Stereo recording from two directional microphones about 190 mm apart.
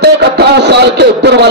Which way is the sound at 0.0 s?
60° right (ahead or behind).